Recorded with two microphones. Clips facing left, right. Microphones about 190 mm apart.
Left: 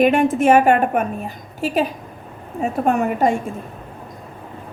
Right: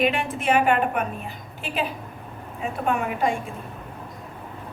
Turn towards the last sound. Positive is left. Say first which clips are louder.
# left 6 dB
turn(degrees=45)  # may be behind; listen again after turning